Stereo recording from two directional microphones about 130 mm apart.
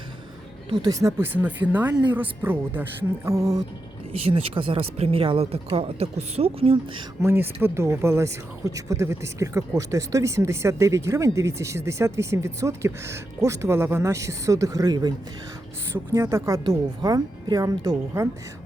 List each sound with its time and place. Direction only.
0.7 s speech: 30° right (ahead or behind)
4.2 s speech: 45° right (ahead or behind)
7.2 s speech: 20° right (ahead or behind)
15.9 s speech: 20° right (ahead or behind)
16.6 s speech: 30° right (ahead or behind)